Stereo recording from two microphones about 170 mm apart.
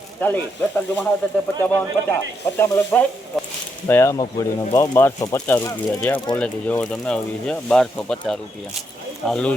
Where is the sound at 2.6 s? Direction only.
15° left (ahead or behind).